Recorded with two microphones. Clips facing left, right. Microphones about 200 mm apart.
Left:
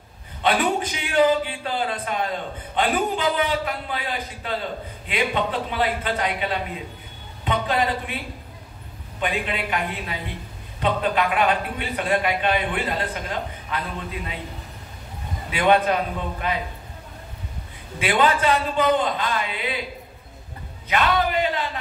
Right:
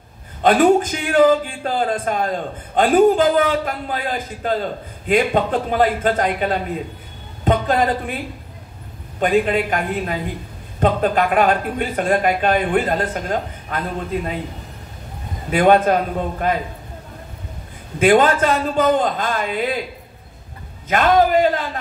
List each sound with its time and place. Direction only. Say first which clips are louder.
0.4 s a man's voice: right 8 dB; 45° right (ahead or behind)
9.2 s a man's voice: right 9 dB; 45° right (ahead or behind)
15.5 s a man's voice: right 5 dB; 45° right (ahead or behind)
17.9 s a man's voice: right 7 dB; 45° right (ahead or behind)
20.9 s a man's voice: right 7 dB; 45° right (ahead or behind)